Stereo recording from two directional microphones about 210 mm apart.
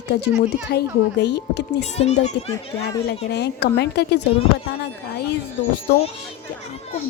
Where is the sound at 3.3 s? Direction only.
50° left (ahead or behind).